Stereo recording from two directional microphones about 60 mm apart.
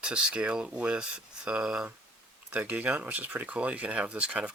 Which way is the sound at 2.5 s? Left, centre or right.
Right.